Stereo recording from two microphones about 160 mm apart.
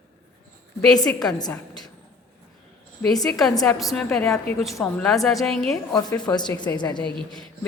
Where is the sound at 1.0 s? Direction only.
25° left (ahead or behind).